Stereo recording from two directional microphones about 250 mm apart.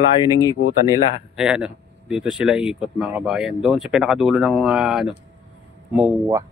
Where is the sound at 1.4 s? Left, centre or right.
Centre.